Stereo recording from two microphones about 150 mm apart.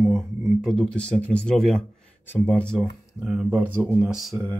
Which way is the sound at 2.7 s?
5° right (ahead or behind).